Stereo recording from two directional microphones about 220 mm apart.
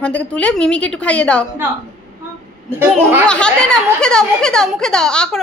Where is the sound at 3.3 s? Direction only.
5° left (ahead or behind).